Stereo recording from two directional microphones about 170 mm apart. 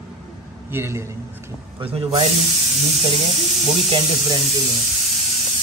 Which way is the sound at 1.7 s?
35° right (ahead or behind).